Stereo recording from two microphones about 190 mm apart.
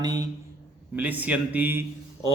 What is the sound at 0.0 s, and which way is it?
Speech, 20° right (ahead or behind).